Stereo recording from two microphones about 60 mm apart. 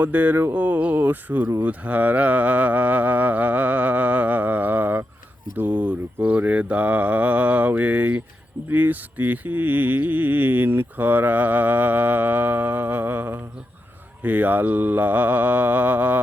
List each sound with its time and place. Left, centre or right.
0.0 s mantra: right